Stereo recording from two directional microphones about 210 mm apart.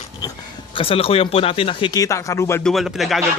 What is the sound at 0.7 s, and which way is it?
Speech, 25° left (ahead or behind).